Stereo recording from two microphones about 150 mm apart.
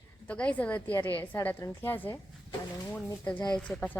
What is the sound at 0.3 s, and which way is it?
A woman's voice, 10° left (ahead or behind).